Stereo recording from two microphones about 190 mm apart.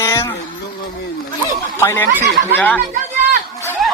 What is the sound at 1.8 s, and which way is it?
Speech, 15° left (ahead or behind).